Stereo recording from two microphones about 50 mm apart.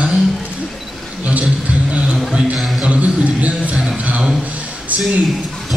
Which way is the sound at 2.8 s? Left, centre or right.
Right.